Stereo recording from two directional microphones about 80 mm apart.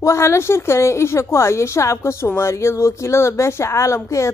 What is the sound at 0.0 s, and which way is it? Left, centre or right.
A woman's voice, left.